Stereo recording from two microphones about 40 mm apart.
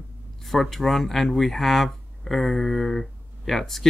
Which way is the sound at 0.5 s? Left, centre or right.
Centre.